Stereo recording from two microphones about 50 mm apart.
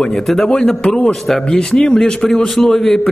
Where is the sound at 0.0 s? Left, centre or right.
Centre.